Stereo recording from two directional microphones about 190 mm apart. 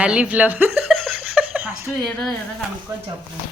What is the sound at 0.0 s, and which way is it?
Speech, 5° right (ahead or behind).